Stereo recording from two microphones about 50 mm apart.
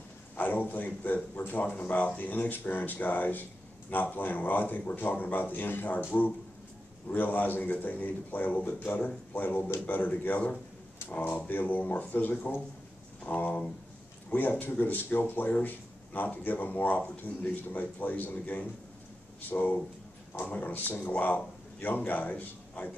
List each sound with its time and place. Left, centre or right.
0.4 s speech: left
7.1 s speech: left